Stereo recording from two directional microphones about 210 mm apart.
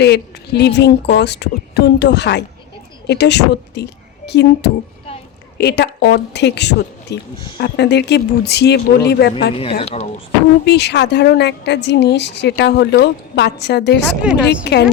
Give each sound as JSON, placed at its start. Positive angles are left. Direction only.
{"t": 0.0, "sound": "a woman's voice", "side_deg": 50}
{"t": 9.8, "sound": "speech", "side_deg": 30}
{"t": 10.7, "sound": "a woman's voice", "side_deg": 55}
{"t": 14.2, "sound": "a woman's voice", "side_deg": -5}
{"t": 14.4, "sound": "a woman's voice", "side_deg": 55}